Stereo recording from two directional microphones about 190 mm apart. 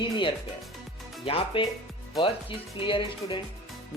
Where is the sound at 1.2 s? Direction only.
30° left (ahead or behind).